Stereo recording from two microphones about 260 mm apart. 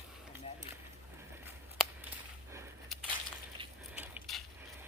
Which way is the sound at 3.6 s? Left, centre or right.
Centre.